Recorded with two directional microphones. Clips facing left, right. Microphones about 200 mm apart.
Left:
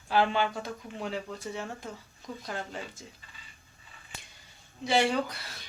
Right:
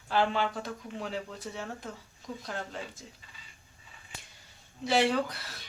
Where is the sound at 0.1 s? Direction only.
5° left (ahead or behind).